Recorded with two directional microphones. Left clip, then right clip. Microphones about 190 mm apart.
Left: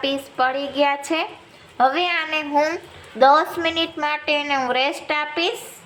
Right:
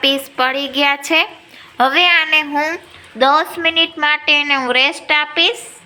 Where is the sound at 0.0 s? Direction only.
5° right (ahead or behind).